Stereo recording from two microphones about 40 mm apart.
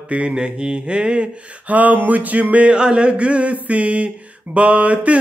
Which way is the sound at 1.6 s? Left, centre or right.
Right.